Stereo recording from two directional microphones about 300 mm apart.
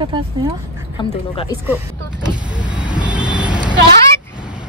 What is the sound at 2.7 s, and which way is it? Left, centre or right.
Vehicle, centre.